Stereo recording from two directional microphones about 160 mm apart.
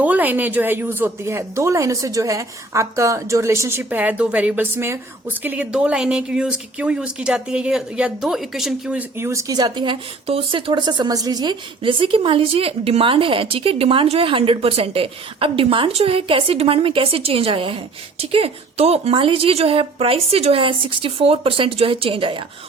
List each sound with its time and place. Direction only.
0.0 s speech: 10° right (ahead or behind); by 22.4 s 35° right (ahead or behind)